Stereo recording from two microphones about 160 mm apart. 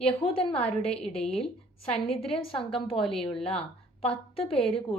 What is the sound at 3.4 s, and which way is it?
Speech, 5° left (ahead or behind).